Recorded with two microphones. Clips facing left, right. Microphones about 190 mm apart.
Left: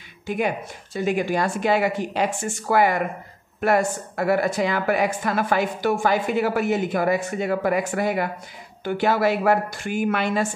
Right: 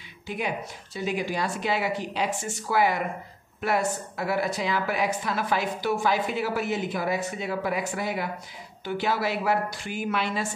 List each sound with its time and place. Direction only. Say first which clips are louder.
0.3 s speech: left 6 dB; 50° left (ahead or behind)